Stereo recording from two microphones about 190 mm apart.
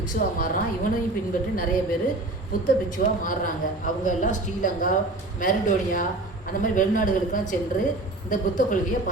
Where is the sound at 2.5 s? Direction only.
45° left (ahead or behind).